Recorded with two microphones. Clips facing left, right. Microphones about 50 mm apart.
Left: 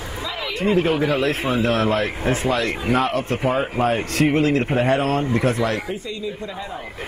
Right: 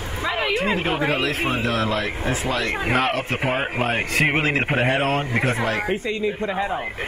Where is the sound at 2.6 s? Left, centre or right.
Right.